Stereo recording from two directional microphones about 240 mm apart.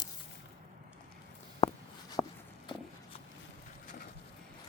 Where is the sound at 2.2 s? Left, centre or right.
Centre.